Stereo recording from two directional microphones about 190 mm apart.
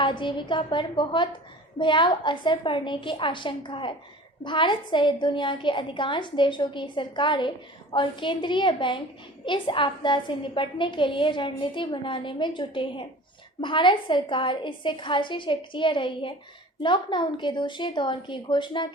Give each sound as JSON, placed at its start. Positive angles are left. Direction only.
{"t": 0.0, "sound": "a woman's voice", "side_deg": 25}